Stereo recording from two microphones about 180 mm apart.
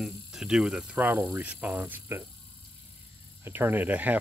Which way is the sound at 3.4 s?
10° right (ahead or behind).